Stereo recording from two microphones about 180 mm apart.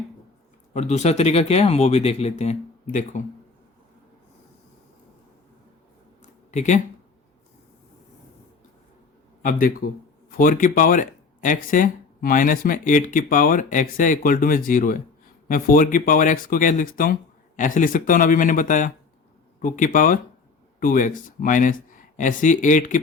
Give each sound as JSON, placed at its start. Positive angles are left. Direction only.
{"t": 0.7, "sound": "speech", "side_deg": 40}
{"t": 6.5, "sound": "speech", "side_deg": 40}
{"t": 9.4, "sound": "speech", "side_deg": 50}